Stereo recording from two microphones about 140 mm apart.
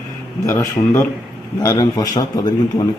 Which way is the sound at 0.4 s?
25° left (ahead or behind).